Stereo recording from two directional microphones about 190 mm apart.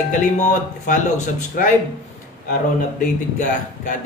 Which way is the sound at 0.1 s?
40° left (ahead or behind).